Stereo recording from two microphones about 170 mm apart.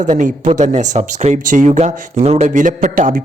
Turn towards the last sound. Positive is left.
turn(degrees=-50)  # may be behind; listen again after turning